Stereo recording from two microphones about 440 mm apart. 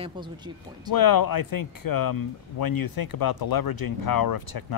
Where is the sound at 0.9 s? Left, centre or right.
Left.